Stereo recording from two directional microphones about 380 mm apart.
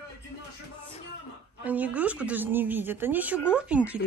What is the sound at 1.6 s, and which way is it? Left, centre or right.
Speech, centre.